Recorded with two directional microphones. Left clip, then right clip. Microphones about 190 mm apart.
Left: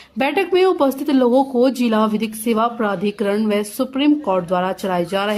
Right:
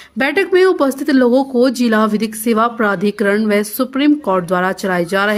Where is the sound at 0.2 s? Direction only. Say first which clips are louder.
Right 4 dB; 15° right (ahead or behind).